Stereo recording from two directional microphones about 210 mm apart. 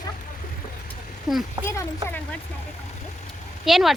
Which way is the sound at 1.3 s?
Centre (ahead or behind).